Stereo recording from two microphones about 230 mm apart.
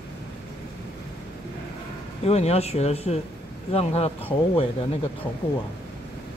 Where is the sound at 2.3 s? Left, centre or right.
Left.